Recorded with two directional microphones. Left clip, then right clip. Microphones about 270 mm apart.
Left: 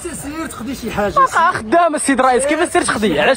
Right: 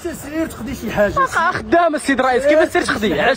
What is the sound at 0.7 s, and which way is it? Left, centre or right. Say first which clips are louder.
Speech: right 2 dB; right.